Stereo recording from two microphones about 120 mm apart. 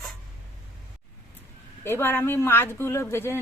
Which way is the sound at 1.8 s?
20° left (ahead or behind).